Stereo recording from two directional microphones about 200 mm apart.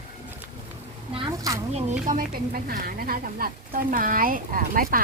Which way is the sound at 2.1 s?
45° right (ahead or behind).